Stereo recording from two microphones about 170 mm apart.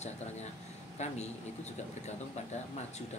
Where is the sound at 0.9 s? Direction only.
40° left (ahead or behind).